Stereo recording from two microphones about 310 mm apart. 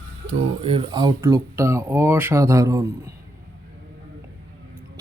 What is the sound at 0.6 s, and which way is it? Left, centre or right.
Speech, centre.